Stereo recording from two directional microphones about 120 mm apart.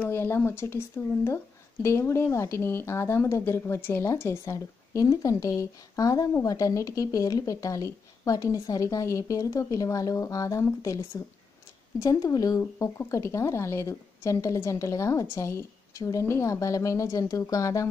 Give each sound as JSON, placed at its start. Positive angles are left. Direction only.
{"t": 0.0, "sound": "speech", "side_deg": 20}
{"t": 12.0, "sound": "speech", "side_deg": 30}